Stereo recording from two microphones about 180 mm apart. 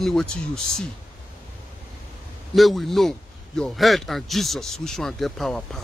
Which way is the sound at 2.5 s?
Centre (ahead or behind).